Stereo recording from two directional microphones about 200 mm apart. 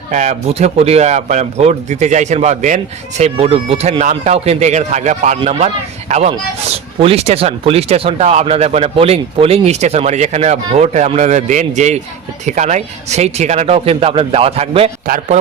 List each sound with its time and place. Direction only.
0.1 s speech: 35° right (ahead or behind)
15.0 s a man's voice: 45° right (ahead or behind)